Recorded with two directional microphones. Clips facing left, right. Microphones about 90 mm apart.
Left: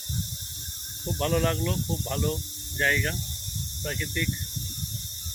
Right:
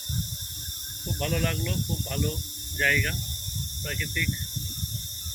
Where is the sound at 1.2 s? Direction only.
30° left (ahead or behind).